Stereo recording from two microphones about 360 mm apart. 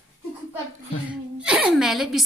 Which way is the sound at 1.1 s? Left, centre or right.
Centre.